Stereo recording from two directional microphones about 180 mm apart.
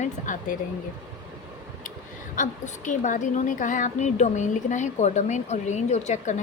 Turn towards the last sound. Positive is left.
turn(degrees=40)  # may be behind; listen again after turning